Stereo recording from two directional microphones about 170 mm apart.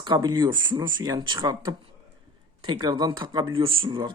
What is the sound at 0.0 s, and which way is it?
Speech, 25° right (ahead or behind).